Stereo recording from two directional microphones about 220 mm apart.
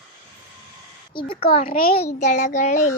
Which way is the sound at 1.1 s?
25° left (ahead or behind).